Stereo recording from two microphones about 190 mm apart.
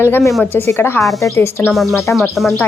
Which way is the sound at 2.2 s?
Centre (ahead or behind).